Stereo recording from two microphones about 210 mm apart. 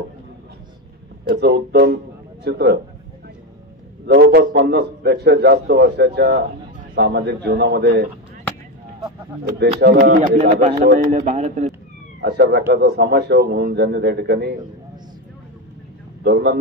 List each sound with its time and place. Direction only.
1.3 s a man's voice: 50° right (ahead or behind)
4.0 s a man's voice: 50° right (ahead or behind)
9.8 s a man's voice: 50° right (ahead or behind); by 11.7 s 30° right (ahead or behind)
12.2 s a man's voice: 50° right (ahead or behind)
16.3 s a man's voice: 50° right (ahead or behind)